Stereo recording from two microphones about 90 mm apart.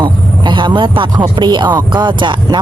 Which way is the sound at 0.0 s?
60° right (ahead or behind).